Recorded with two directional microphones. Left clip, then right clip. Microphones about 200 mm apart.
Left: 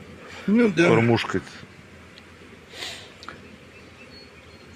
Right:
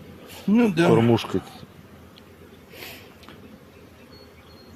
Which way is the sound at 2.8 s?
15° right (ahead or behind).